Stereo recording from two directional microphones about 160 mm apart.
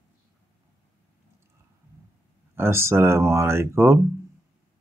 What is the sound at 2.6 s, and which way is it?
Speech, 15° right (ahead or behind).